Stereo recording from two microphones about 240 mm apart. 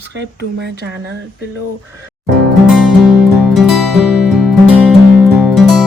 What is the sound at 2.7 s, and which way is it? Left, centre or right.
Music, centre.